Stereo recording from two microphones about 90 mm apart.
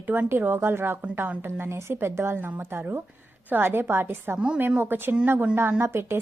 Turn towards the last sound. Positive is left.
turn(degrees=-25)  # may be behind; listen again after turning